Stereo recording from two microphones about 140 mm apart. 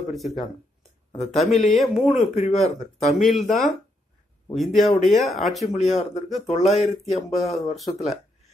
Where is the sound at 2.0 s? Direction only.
50° left (ahead or behind).